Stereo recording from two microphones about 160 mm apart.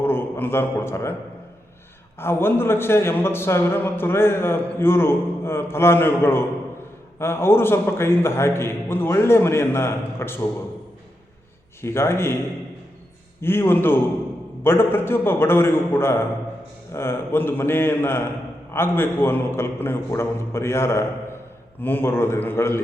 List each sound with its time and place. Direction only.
0.0 s a man's voice: 15° left (ahead or behind)
2.1 s a man's voice: 15° left (ahead or behind)
11.8 s a man's voice: 15° left (ahead or behind)
13.4 s a man's voice: 15° left (ahead or behind)